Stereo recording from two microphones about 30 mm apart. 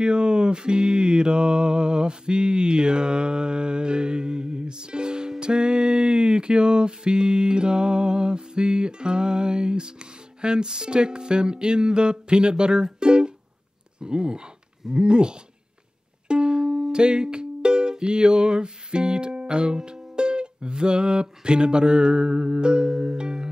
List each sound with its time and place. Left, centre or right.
0.0 s mantra: right
5.4 s music: right
13.9 s speech: right
14.9 s music: right
16.6 s music: centre
16.9 s music: right